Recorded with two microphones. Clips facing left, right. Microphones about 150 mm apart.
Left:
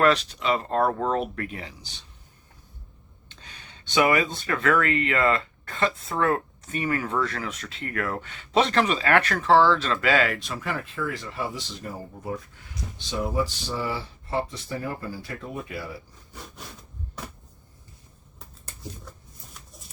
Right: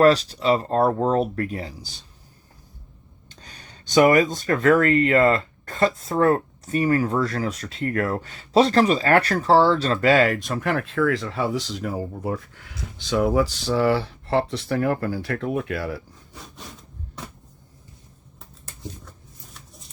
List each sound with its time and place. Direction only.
0.0 s speech: 35° right (ahead or behind)
3.2 s speech: 40° right (ahead or behind); by 12.4 s 70° right (ahead or behind)
13.1 s speech: 90° right